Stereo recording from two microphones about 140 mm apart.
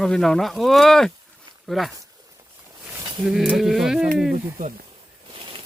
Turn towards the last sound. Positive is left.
turn(degrees=-40)  # may be behind; listen again after turning